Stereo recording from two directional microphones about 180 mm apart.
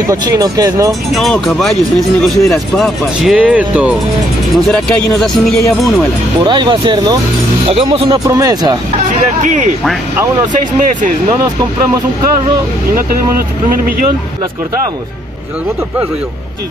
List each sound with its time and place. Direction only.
0.0 s speech: 20° right (ahead or behind)
1.1 s speech: centre (ahead or behind)
6.4 s speech: 25° right (ahead or behind)
8.3 s speech: 20° right (ahead or behind)
9.1 s speech: 45° right (ahead or behind)
13.7 s speech: 50° right (ahead or behind)